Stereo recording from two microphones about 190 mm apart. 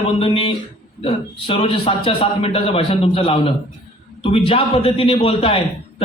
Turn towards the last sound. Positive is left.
turn(degrees=30)  # may be behind; listen again after turning